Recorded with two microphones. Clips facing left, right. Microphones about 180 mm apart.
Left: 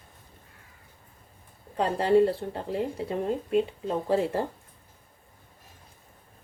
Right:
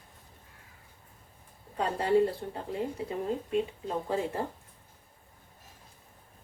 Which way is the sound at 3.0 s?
70° left (ahead or behind).